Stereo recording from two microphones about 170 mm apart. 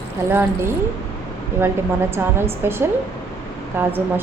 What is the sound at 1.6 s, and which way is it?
A woman's voice, 15° right (ahead or behind).